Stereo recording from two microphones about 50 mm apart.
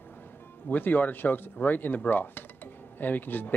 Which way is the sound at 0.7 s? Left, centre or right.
Left.